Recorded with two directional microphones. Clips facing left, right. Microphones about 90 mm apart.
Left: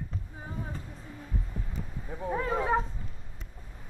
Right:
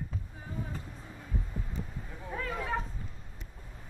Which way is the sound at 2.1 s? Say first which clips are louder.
Left 9 dB; 30° left (ahead or behind).